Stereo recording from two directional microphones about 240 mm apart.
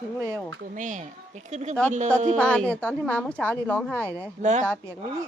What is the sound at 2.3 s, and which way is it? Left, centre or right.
A woman's voice, centre.